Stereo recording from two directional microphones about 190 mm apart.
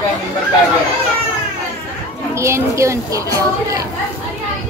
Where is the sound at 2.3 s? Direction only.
15° right (ahead or behind).